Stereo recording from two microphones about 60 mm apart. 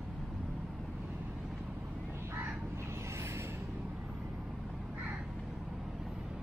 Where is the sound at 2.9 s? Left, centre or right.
Right.